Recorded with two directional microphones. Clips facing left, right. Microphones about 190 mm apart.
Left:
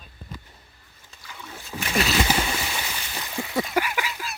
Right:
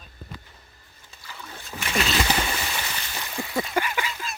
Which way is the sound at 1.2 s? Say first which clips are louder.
Even; centre (ahead or behind).